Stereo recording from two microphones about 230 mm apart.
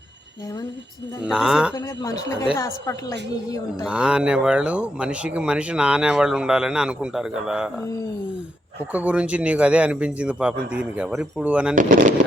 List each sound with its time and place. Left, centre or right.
1.2 s speech: centre
1.7 s a woman's voice: centre
3.8 s speech: centre
8.9 s speech: centre
11.7 s speech: right